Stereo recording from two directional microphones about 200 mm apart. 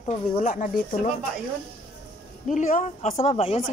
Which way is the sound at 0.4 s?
40° left (ahead or behind).